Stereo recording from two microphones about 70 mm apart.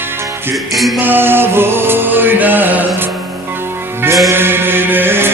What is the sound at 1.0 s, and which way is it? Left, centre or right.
Music, right.